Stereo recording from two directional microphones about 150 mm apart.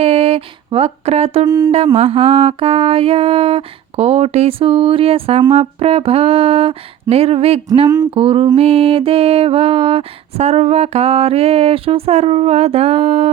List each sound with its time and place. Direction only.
0.0 s speech: 40° right (ahead or behind)
1.5 s speech: 25° right (ahead or behind)
2.0 s music: 45° right (ahead or behind)